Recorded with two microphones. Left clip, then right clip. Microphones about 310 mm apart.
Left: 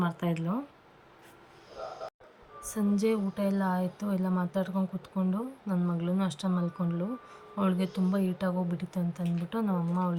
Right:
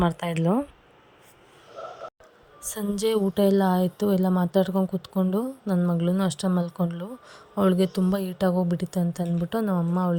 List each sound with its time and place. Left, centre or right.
0.0 s speech: centre
2.6 s speech: centre